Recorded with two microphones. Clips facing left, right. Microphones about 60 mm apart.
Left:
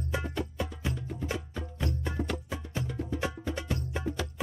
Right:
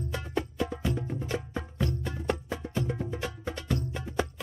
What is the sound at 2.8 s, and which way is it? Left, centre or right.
Music, right.